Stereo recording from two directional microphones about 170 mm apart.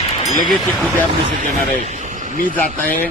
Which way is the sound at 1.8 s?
45° right (ahead or behind).